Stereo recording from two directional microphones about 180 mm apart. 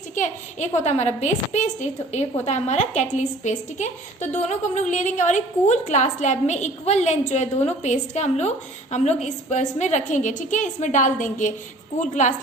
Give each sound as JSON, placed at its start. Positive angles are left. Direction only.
{"t": 0.1, "sound": "a woman's voice", "side_deg": 40}